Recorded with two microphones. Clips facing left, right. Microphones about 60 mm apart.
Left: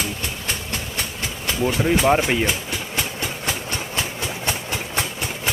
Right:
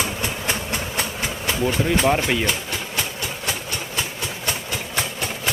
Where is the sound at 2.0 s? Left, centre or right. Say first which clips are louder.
Left 2 dB; centre.